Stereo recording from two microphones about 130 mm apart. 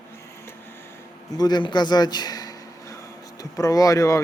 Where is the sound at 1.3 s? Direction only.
30° left (ahead or behind).